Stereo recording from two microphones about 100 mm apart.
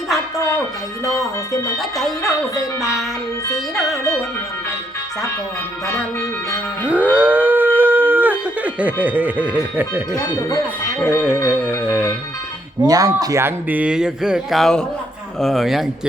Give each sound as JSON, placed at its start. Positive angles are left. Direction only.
{"t": 1.8, "sound": "speech", "side_deg": 0}
{"t": 3.8, "sound": "speech", "side_deg": 0}
{"t": 6.8, "sound": "livestock", "side_deg": -15}
{"t": 9.5, "sound": "speech", "side_deg": -15}
{"t": 11.0, "sound": "music", "side_deg": 25}
{"t": 12.9, "sound": "speech", "side_deg": -35}
{"t": 13.4, "sound": "speech", "side_deg": -15}